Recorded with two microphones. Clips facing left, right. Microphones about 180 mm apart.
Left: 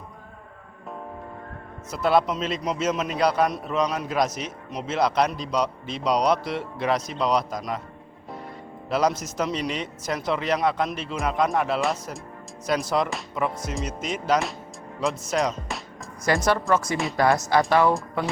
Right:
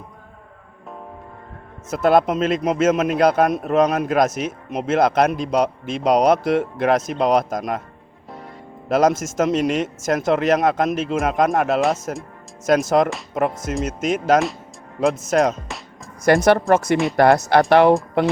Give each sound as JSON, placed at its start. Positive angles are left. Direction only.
{"t": 1.9, "sound": "a man's voice", "side_deg": -50}
{"t": 8.9, "sound": "a man's voice", "side_deg": -50}
{"t": 12.6, "sound": "a man's voice", "side_deg": -45}
{"t": 16.2, "sound": "speech", "side_deg": -65}